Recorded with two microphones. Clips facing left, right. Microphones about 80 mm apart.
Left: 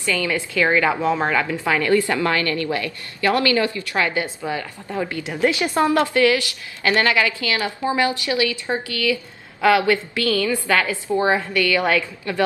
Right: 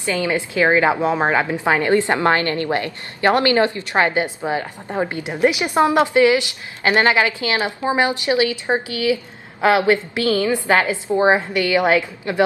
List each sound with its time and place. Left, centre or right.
0.0 s a woman's voice: right